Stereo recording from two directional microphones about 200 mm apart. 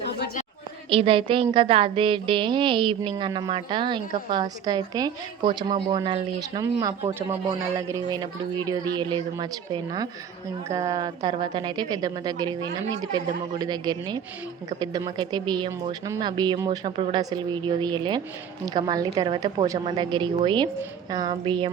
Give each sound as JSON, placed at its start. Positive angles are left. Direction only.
{"t": 0.9, "sound": "a woman's voice", "side_deg": -25}
{"t": 13.6, "sound": "a woman's voice", "side_deg": -20}